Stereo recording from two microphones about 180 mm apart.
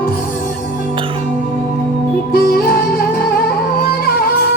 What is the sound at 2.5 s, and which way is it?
Music, 55° left (ahead or behind).